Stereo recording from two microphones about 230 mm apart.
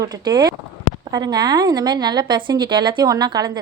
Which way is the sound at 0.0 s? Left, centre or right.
Centre.